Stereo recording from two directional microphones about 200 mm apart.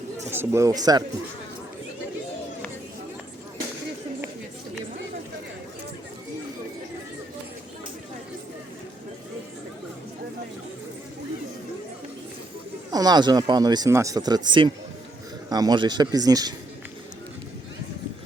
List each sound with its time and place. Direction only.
0.3 s a man's voice: 10° right (ahead or behind)
12.9 s speech: 20° right (ahead or behind)